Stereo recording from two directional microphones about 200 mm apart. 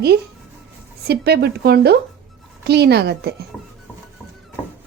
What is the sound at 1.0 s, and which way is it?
A woman's voice, 55° right (ahead or behind).